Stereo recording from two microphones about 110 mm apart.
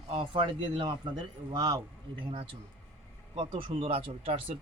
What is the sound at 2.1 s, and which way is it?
Speech, 55° right (ahead or behind).